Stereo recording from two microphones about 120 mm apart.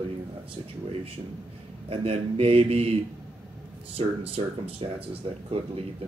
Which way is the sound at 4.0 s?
55° right (ahead or behind).